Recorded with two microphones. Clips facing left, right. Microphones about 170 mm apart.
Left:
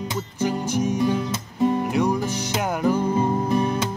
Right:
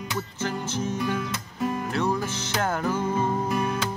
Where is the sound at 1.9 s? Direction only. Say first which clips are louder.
Left 4 dB; 15° left (ahead or behind).